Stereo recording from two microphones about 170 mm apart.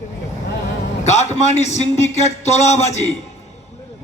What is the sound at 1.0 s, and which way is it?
A man's voice, 40° left (ahead or behind).